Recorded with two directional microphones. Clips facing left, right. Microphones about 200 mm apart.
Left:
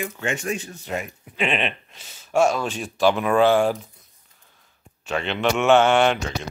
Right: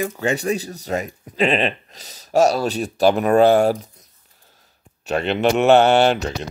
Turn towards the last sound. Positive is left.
turn(degrees=-35)  # may be behind; listen again after turning